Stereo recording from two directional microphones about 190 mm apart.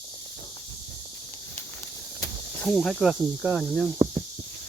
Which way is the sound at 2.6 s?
Centre (ahead or behind).